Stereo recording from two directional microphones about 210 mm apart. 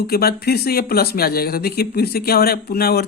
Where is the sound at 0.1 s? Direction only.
50° left (ahead or behind).